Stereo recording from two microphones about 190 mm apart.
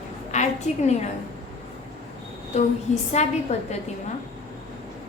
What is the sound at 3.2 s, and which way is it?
Speech, 35° left (ahead or behind).